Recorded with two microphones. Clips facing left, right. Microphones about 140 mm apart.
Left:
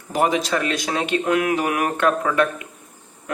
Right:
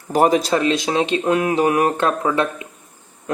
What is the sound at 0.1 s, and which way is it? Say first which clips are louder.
Speech: right 4 dB; 40° right (ahead or behind).